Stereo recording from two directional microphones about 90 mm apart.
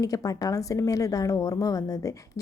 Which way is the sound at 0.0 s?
40° left (ahead or behind).